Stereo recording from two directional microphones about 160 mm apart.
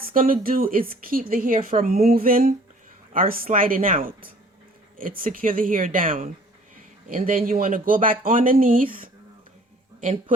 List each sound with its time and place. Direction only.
0.0 s speech: 60° right (ahead or behind)